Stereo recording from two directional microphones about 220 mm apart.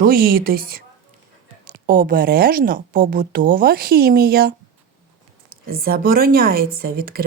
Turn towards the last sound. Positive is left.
turn(degrees=-40)  # may be behind; listen again after turning